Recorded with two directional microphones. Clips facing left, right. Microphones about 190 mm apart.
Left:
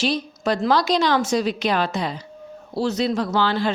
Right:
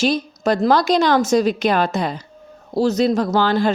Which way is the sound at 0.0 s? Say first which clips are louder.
Right 4 dB; 45° right (ahead or behind).